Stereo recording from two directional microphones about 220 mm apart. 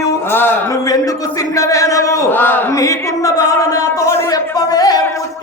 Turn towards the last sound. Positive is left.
turn(degrees=15)  # may be behind; listen again after turning